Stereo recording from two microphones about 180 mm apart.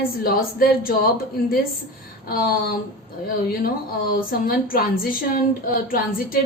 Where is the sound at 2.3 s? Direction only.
55° left (ahead or behind).